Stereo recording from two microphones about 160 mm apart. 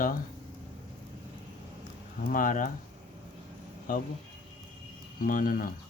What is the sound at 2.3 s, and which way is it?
Speech, 60° left (ahead or behind).